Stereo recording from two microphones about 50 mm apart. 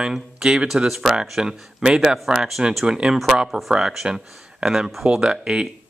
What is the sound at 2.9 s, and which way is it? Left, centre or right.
Speech, centre.